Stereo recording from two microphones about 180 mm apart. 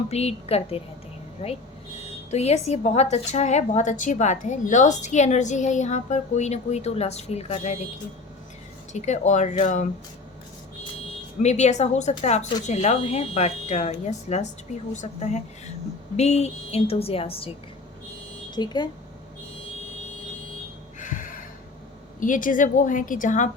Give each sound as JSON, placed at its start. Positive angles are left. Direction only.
{"t": 0.1, "sound": "a woman's voice", "side_deg": 35}
{"t": 8.9, "sound": "a woman's voice", "side_deg": 40}
{"t": 11.4, "sound": "a woman's voice", "side_deg": 40}
{"t": 18.5, "sound": "speech", "side_deg": 25}
{"t": 21.0, "sound": "a sound", "side_deg": 50}
{"t": 22.2, "sound": "a woman's voice", "side_deg": 45}